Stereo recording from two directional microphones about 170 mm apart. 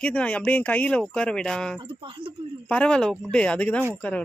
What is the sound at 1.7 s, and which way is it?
Speech, 30° right (ahead or behind).